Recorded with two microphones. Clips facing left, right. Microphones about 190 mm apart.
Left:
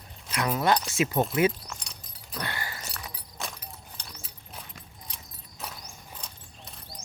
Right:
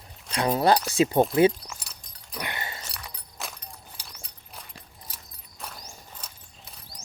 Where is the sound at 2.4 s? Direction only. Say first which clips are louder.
Right 1 dB; 20° right (ahead or behind).